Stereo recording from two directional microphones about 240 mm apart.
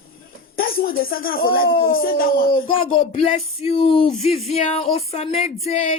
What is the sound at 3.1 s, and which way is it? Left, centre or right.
Speech, left.